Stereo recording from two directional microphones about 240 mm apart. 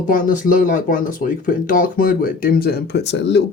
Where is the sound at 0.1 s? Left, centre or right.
Left.